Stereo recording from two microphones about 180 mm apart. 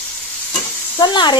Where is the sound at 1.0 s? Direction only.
25° left (ahead or behind).